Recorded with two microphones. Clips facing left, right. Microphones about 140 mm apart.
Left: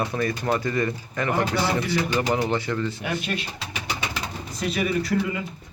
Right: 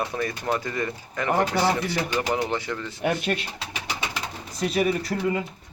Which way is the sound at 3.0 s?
50° right (ahead or behind).